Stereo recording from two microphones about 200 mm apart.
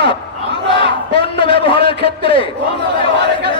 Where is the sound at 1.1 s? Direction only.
25° left (ahead or behind).